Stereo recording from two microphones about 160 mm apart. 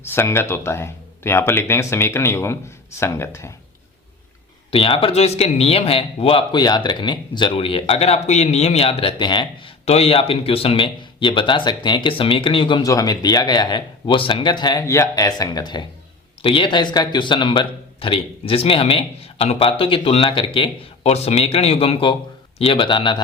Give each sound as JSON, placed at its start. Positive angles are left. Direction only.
{"t": 0.0, "sound": "speech", "side_deg": 15}
{"t": 4.7, "sound": "speech", "side_deg": 35}